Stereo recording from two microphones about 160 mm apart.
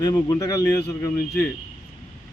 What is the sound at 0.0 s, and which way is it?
Speech, 20° left (ahead or behind).